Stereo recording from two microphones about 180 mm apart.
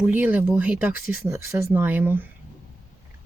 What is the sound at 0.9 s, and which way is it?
Speech, 55° left (ahead or behind).